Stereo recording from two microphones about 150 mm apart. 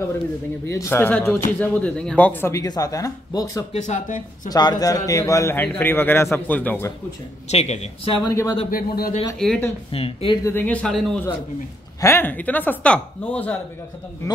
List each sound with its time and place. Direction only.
0.7 s speech: 20° left (ahead or behind)
2.5 s speech: 25° left (ahead or behind)
3.7 s speech: 50° left (ahead or behind)
4.5 s speech: 25° left (ahead or behind); by 6.9 s 10° left (ahead or behind)
7.4 s speech: 45° left (ahead or behind)
8.3 s speech: 20° left (ahead or behind)
8.6 s a man's voice: 75° left (ahead or behind)
9.4 s speech: 5° left (ahead or behind)
9.8 s speech: 35° left (ahead or behind)
10.4 s speech: 15° left (ahead or behind)
12.0 s speech: 15° left (ahead or behind)